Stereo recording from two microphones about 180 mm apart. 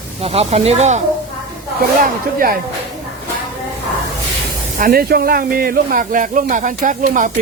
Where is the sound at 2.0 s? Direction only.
50° right (ahead or behind).